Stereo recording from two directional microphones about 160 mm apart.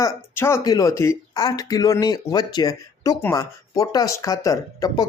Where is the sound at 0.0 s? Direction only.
15° left (ahead or behind).